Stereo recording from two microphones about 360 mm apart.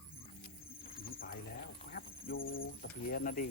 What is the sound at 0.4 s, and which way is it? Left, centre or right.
Pigeon, centre.